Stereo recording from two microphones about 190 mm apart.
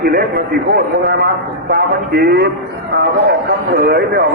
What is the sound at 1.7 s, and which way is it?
A man's voice, 55° right (ahead or behind).